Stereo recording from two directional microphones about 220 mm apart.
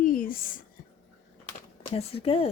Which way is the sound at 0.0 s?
40° left (ahead or behind).